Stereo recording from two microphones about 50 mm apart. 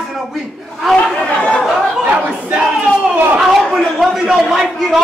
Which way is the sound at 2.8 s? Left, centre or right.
Centre.